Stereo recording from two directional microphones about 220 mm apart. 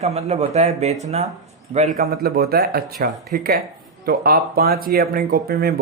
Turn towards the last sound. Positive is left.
turn(degrees=-45)  # may be behind; listen again after turning